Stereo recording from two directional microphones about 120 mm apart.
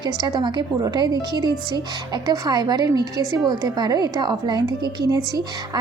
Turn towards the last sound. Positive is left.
turn(degrees=-30)  # may be behind; listen again after turning